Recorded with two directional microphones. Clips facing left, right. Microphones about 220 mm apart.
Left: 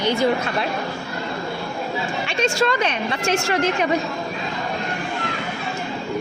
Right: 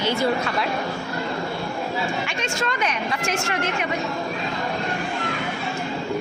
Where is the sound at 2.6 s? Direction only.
30° left (ahead or behind).